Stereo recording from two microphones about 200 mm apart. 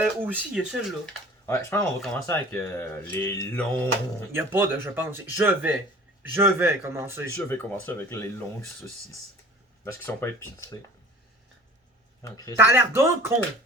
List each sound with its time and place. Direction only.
0.0 s speech: 10° right (ahead or behind)
1.5 s speech: 15° left (ahead or behind)
4.3 s speech: 10° right (ahead or behind)
7.3 s speech: 10° left (ahead or behind)
9.8 s speech: 10° left (ahead or behind)
12.2 s speech: 15° left (ahead or behind)
12.5 s speech: 10° right (ahead or behind)